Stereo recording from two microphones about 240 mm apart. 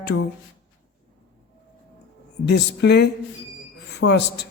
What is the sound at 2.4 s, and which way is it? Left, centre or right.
A woman's voice, left.